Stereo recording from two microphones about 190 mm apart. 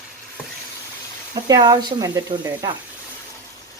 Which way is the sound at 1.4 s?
20° right (ahead or behind).